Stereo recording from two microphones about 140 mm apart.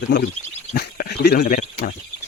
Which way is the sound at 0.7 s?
90° left.